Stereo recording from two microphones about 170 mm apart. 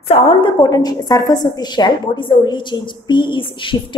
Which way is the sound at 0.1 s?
30° left (ahead or behind).